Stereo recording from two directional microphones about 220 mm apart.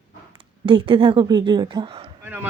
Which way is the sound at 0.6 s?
25° right (ahead or behind).